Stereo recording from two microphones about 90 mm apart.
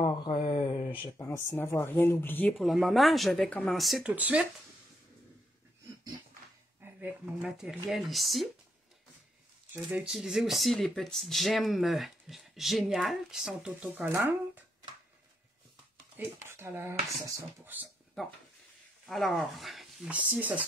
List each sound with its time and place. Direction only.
0.0 s a sound: 55° left (ahead or behind)
1.1 s speech: 30° left (ahead or behind)
2.5 s speech: centre (ahead or behind)
4.0 s speech: 15° right (ahead or behind)
6.8 s a sound: 20° right (ahead or behind)
7.4 s speech: 5° right (ahead or behind)
9.9 s speech: 5° right (ahead or behind)
16.2 s speech: 25° right (ahead or behind)
18.2 s speech: 5° left (ahead or behind)
20.1 s speech: 15° right (ahead or behind)